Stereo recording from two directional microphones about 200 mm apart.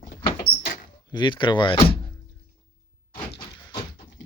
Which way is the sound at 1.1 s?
25° left (ahead or behind).